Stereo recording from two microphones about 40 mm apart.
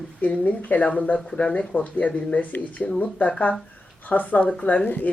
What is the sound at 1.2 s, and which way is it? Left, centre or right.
Speech, centre.